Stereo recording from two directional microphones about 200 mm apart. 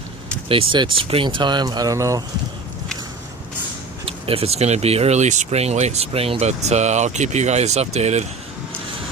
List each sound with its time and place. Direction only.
0.4 s speech: 25° right (ahead or behind)
4.0 s speech: 30° right (ahead or behind)